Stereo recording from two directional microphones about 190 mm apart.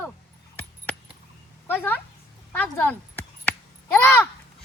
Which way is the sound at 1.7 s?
10° left (ahead or behind).